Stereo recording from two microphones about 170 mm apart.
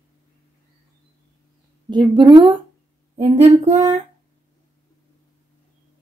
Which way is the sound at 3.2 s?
40° right (ahead or behind).